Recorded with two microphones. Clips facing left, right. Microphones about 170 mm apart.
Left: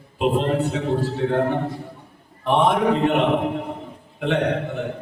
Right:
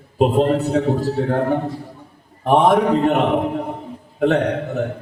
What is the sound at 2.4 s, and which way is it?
Speech, 40° right (ahead or behind).